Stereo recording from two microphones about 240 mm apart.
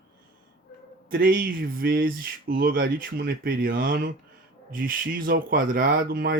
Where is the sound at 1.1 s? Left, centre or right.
Right.